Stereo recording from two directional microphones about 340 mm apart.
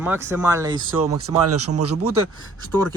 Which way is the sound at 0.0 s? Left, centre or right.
Centre.